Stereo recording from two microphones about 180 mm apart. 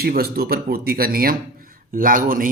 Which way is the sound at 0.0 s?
60° right (ahead or behind).